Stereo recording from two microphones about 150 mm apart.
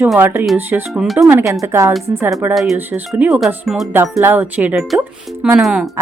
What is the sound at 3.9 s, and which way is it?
Speech, 15° right (ahead or behind).